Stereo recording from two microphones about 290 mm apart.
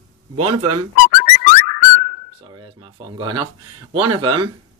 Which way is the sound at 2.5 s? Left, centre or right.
Centre.